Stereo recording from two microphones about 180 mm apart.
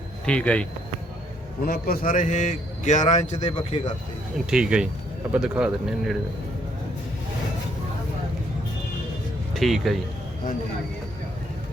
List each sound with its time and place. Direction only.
0.3 s speech: 5° left (ahead or behind)
1.6 s a man's voice: 55° left (ahead or behind)
3.5 s a man's voice: 30° left (ahead or behind)
4.4 s speech: 5° right (ahead or behind)
9.6 s speech: centre (ahead or behind)